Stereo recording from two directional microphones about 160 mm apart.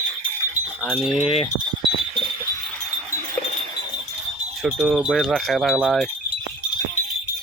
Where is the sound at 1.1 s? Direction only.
35° left (ahead or behind).